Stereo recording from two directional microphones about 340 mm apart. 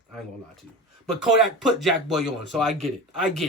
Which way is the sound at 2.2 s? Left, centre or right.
Right.